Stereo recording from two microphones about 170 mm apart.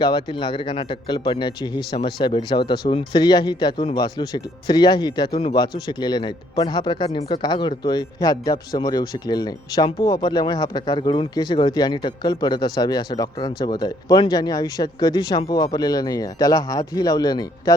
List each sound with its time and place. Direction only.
0.0 s speech: 25° left (ahead or behind)